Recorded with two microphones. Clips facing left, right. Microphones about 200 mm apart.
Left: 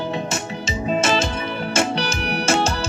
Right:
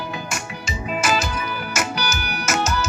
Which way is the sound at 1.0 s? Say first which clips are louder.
Left 2 dB; 25° left (ahead or behind).